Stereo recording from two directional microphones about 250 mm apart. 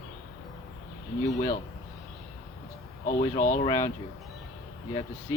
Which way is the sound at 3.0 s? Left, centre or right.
Left.